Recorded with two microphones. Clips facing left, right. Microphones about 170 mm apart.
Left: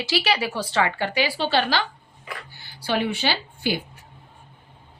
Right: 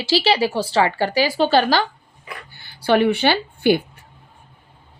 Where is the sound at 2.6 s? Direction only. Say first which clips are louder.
Right 8 dB; 60° right (ahead or behind).